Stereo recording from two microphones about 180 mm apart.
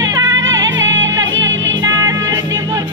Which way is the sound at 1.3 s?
90° right.